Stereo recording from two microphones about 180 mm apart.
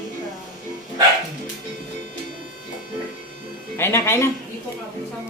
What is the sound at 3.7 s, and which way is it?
Speech, 15° left (ahead or behind).